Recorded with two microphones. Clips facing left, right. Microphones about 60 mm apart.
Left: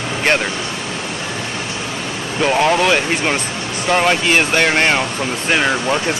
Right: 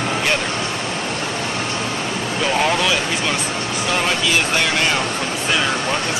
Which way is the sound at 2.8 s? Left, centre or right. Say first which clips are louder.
Left 4 dB; left.